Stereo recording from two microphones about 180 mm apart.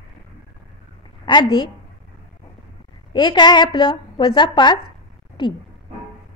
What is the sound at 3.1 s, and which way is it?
A woman's voice, 25° left (ahead or behind).